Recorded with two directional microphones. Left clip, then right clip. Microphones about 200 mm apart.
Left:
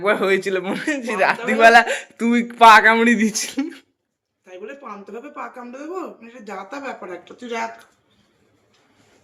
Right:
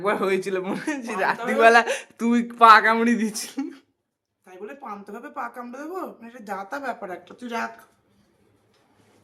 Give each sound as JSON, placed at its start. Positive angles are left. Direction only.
{"t": 0.0, "sound": "a man's voice", "side_deg": 5}
{"t": 4.4, "sound": "speech", "side_deg": -20}